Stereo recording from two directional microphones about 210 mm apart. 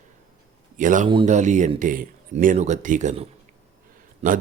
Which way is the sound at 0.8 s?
40° right (ahead or behind).